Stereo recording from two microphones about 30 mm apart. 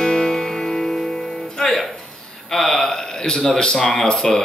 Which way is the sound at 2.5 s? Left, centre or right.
Centre.